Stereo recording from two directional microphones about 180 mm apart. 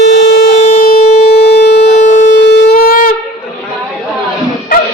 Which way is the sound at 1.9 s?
40° left (ahead or behind).